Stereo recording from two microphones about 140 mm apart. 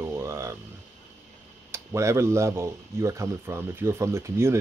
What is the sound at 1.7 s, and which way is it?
Speech, 20° right (ahead or behind).